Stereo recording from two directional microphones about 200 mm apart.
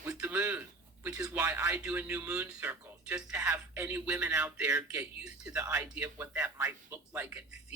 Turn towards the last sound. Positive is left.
turn(degrees=-10)  # may be behind; listen again after turning